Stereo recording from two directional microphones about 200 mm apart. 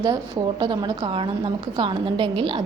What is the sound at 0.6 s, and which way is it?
A woman's voice, 25° right (ahead or behind).